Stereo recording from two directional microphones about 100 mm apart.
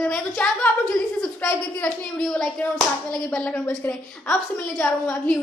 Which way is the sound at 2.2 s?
10° left (ahead or behind).